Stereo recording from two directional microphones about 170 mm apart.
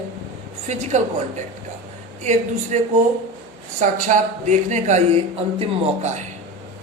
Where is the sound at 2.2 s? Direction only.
45° right (ahead or behind).